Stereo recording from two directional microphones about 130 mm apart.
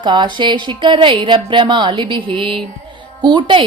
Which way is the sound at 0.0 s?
35° right (ahead or behind).